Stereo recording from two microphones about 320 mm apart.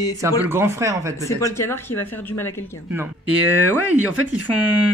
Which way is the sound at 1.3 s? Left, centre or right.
Centre.